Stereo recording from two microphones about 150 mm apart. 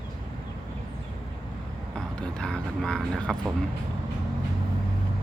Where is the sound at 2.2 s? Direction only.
5° left (ahead or behind).